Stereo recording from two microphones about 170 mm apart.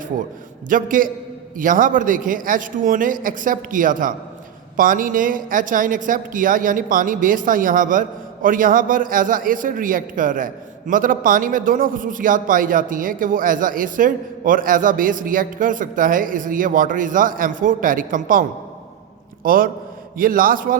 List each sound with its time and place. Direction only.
0.7 s a man's voice: 55° right (ahead or behind)